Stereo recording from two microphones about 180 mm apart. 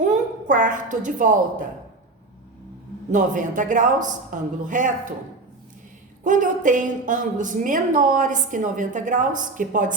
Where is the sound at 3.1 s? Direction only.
45° right (ahead or behind).